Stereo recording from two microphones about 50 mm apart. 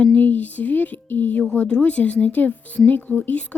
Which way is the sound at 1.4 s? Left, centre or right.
Centre.